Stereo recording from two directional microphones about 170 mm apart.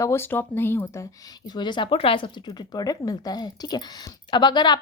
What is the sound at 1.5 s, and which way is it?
A woman's voice, 25° left (ahead or behind).